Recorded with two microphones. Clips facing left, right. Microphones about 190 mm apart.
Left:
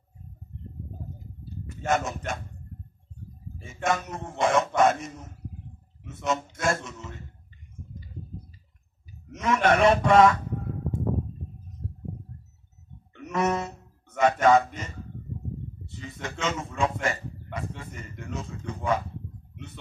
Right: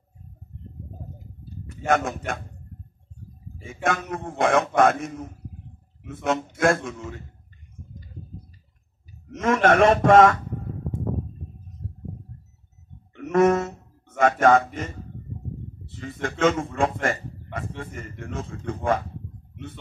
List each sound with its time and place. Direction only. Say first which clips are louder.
1.9 s a man's voice: right 4 dB; 55° right (ahead or behind)
3.6 s a man's voice: right 1 dB; 55° right (ahead or behind)
9.4 s a man's voice: right 3 dB; 45° right (ahead or behind)
13.2 s a sound: right 8 dB; 50° right (ahead or behind)
16.0 s a man's voice: right 10 dB; 50° right (ahead or behind)